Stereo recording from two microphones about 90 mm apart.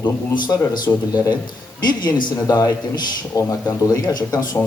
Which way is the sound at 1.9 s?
55° left (ahead or behind).